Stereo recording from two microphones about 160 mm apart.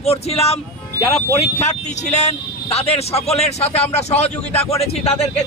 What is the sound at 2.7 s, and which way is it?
A man's voice, 40° left (ahead or behind).